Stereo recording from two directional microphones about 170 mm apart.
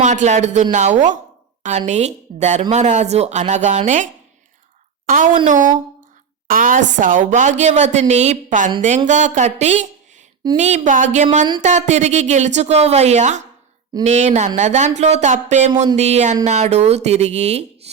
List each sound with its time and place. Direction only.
0.0 s speech: 45° right (ahead or behind)